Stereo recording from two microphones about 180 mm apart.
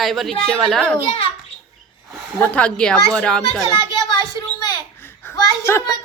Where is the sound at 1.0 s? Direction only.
30° left (ahead or behind).